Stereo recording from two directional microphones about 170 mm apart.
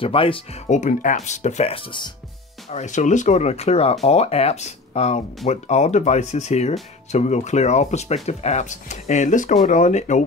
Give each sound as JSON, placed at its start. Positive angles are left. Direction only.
{"t": 0.0, "sound": "speech", "side_deg": 30}
{"t": 0.7, "sound": "speech", "side_deg": 45}
{"t": 2.7, "sound": "speech", "side_deg": 45}